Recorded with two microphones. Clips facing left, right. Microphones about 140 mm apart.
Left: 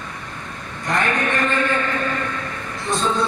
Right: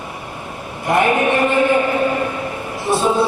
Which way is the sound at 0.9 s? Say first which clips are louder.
Right 6 dB; 15° right (ahead or behind).